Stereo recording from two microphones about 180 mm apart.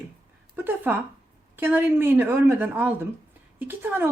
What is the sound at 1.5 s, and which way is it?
A woman's voice, 10° right (ahead or behind).